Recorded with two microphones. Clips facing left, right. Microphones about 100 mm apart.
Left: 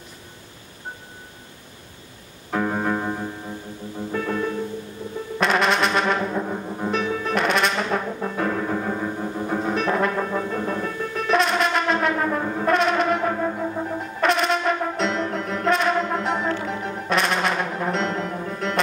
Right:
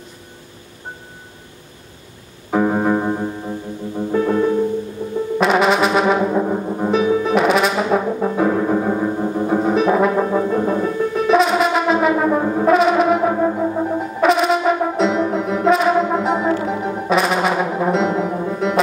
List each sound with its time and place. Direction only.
2.5 s music: 15° right (ahead or behind)
5.0 s music: 20° right (ahead or behind)
5.4 s brass instrument: 5° right (ahead or behind)
6.2 s brass instrument: 20° right (ahead or behind)
6.9 s brass instrument: 5° right (ahead or behind)
8.1 s music: 15° right (ahead or behind)
12.6 s brass instrument: 5° right (ahead or behind)